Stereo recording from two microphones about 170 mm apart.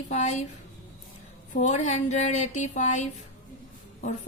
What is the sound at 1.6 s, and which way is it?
Speech, 40° left (ahead or behind).